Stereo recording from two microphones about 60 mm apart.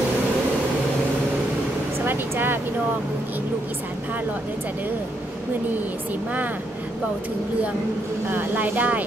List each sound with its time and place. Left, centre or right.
2.0 s speech: right
8.3 s speech: right